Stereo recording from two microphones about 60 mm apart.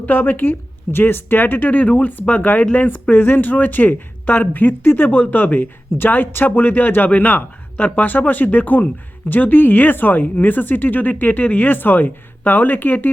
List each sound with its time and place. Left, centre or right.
0.0 s speech: left